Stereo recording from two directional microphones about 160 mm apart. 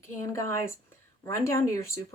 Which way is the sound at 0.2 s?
15° left (ahead or behind).